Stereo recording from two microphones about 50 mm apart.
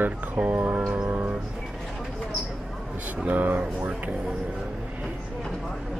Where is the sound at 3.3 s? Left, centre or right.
Right.